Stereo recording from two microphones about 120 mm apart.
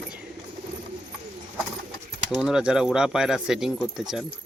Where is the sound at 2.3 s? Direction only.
5° right (ahead or behind).